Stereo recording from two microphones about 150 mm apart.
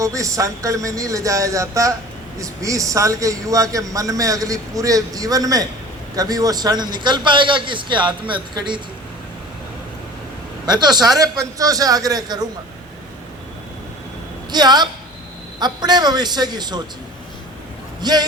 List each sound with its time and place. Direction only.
0.0 s a man's voice: 20° right (ahead or behind)
10.7 s a man's voice: 30° right (ahead or behind)
14.5 s a man's voice: 30° right (ahead or behind)
18.0 s a man's voice: 25° right (ahead or behind)